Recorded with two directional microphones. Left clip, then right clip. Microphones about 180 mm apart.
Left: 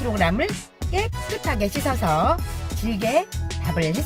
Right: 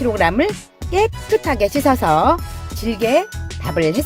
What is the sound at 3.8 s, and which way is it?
Speech, centre (ahead or behind).